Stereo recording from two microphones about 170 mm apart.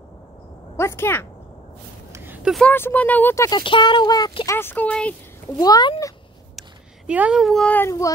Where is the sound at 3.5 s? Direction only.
25° left (ahead or behind).